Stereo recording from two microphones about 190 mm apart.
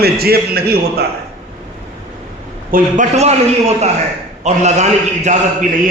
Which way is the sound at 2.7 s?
45° right (ahead or behind).